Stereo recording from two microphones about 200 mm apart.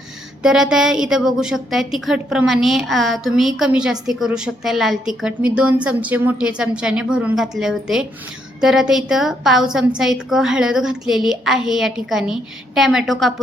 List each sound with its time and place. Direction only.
0.4 s a woman's voice: centre (ahead or behind)